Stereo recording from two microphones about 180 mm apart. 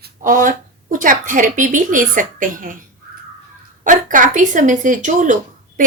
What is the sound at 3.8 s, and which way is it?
A woman's voice, 45° right (ahead or behind).